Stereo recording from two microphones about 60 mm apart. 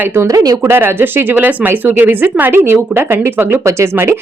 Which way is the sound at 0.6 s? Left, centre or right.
Right.